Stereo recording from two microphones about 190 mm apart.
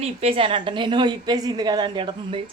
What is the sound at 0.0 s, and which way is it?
A woman's voice, 30° right (ahead or behind).